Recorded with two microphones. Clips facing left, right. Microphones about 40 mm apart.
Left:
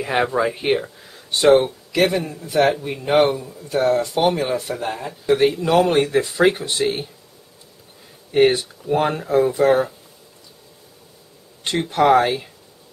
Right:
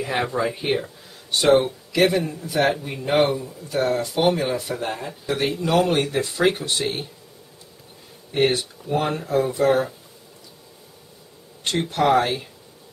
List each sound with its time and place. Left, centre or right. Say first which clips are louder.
0.0 s a man's voice: left 4 dB; centre
8.3 s a man's voice: left 5 dB; centre
11.9 s a man's voice: left 4 dB; centre